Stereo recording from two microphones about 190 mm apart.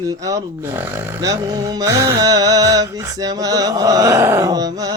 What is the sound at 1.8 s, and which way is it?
Music, 20° right (ahead or behind).